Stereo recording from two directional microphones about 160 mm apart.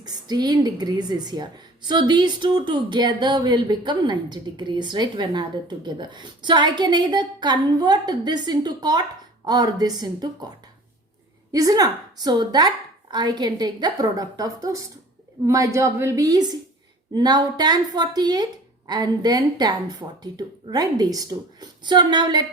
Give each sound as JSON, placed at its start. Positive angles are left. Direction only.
{"t": 0.0, "sound": "a woman's voice", "side_deg": -25}
{"t": 11.5, "sound": "a woman's voice", "side_deg": -20}